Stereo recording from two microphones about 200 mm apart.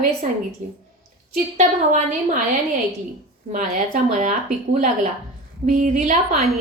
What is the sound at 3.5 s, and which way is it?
Speech, 40° right (ahead or behind).